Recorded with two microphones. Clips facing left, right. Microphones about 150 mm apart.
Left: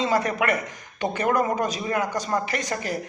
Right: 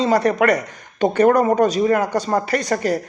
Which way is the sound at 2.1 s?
35° right (ahead or behind).